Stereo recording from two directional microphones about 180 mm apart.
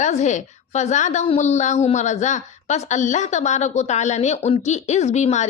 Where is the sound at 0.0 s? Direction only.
40° left (ahead or behind).